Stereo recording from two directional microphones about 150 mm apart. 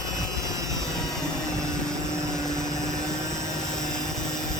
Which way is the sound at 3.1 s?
20° right (ahead or behind).